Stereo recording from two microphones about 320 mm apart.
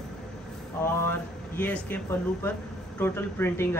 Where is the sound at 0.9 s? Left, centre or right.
Centre.